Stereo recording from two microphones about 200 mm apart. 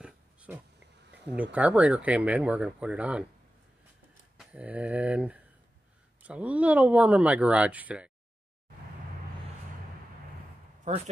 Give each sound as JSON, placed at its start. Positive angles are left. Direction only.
{"t": 0.0, "sound": "dog", "side_deg": -5}
{"t": 1.3, "sound": "speech", "side_deg": -5}
{"t": 4.4, "sound": "speech", "side_deg": -5}
{"t": 10.9, "sound": "speech", "side_deg": -35}